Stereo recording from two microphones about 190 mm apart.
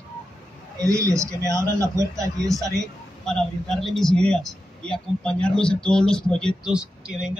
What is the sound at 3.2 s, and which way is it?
A man's voice, 5° left (ahead or behind).